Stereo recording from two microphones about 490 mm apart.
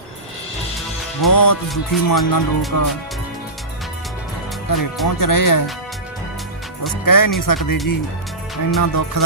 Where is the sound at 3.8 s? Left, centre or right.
Centre.